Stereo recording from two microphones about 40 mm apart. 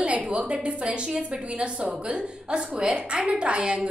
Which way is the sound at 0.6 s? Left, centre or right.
Right.